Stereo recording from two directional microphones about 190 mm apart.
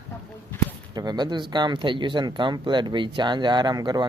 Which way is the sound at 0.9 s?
20° right (ahead or behind).